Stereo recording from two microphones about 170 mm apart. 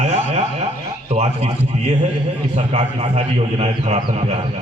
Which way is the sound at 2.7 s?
35° right (ahead or behind).